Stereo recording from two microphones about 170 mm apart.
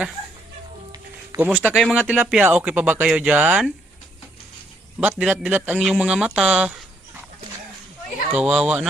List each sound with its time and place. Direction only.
1.3 s speech: 10° right (ahead or behind)
4.9 s speech: 5° right (ahead or behind)
8.3 s speech: 5° right (ahead or behind)